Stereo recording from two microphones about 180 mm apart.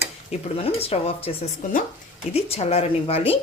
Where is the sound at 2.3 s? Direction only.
35° left (ahead or behind).